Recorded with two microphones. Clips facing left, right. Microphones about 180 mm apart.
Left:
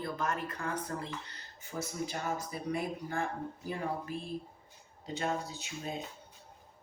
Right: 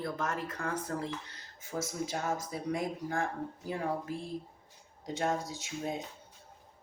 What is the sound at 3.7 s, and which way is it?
Speech, 70° right (ahead or behind).